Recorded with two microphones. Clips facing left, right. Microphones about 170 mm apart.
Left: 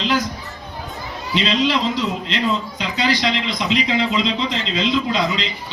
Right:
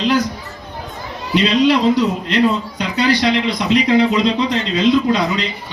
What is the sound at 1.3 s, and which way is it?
A man's voice, 60° right (ahead or behind).